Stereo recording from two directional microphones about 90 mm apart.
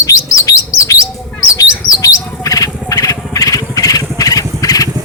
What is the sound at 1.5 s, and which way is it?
Bird, 40° left (ahead or behind).